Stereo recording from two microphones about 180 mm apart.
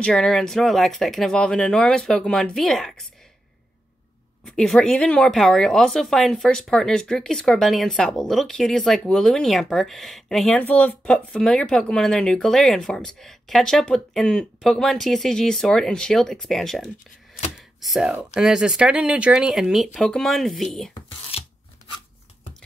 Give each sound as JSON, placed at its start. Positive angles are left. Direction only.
{"t": 0.0, "sound": "speech", "side_deg": 0}
{"t": 4.5, "sound": "speech", "side_deg": 5}
{"t": 21.3, "sound": "scissors", "side_deg": 35}